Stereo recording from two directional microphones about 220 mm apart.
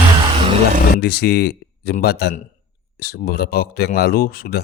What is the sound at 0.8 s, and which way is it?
Speech, 45° left (ahead or behind).